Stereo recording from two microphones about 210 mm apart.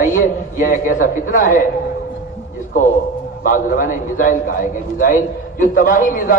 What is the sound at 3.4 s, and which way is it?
A man's voice, 40° left (ahead or behind).